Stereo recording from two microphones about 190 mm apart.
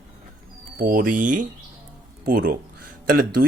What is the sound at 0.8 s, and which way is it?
Speech, 50° right (ahead or behind).